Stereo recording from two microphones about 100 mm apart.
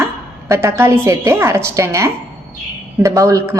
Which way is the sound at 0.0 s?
30° right (ahead or behind).